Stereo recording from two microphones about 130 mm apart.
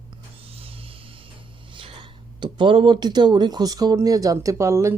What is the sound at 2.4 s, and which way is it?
Speech, 40° right (ahead or behind).